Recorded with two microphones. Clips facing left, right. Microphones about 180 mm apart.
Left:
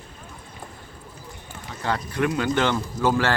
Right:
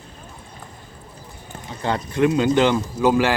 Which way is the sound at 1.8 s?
20° right (ahead or behind).